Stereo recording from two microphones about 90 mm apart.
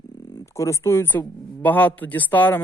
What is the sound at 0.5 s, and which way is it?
Speech, 30° left (ahead or behind).